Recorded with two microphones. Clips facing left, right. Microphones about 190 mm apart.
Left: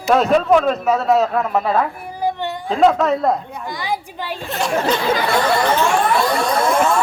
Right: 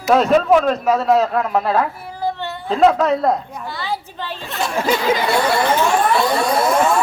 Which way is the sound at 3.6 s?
15° left (ahead or behind).